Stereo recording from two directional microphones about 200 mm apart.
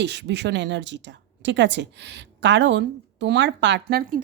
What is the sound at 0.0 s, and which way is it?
A woman's voice, 60° right (ahead or behind).